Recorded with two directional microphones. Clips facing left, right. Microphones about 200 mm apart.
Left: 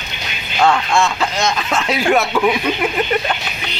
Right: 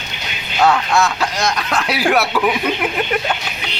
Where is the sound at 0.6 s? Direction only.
5° right (ahead or behind).